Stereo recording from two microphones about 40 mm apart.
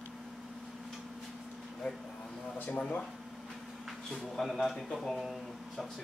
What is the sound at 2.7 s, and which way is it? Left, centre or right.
Speech, left.